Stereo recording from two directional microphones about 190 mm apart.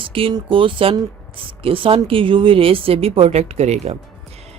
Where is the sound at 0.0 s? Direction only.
30° right (ahead or behind).